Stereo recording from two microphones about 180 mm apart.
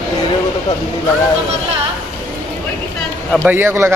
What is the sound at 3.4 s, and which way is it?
Speech, 10° right (ahead or behind).